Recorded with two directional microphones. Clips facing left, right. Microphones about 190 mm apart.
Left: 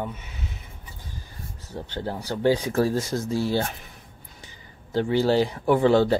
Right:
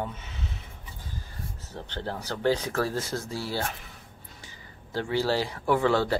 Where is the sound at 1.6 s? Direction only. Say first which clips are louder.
Left 4 dB; 10° left (ahead or behind).